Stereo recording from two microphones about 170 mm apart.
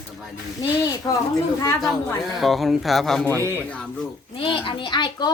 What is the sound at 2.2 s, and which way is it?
Speech, centre (ahead or behind).